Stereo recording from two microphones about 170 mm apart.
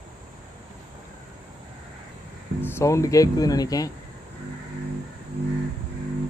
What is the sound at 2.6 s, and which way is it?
Speech, 15° left (ahead or behind).